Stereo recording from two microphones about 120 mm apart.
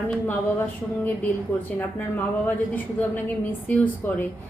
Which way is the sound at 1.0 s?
15° left (ahead or behind).